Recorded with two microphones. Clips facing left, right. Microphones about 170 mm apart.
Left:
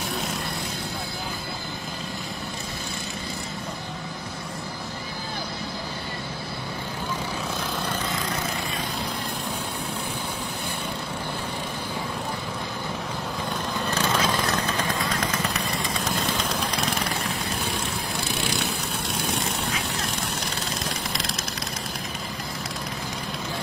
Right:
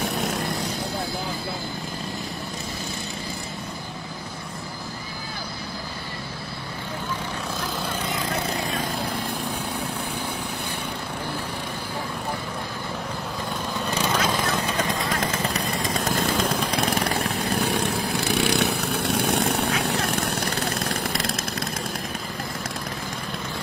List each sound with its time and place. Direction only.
13.9 s vehicle: 10° right (ahead or behind)
16.2 s vehicle: 50° right (ahead or behind)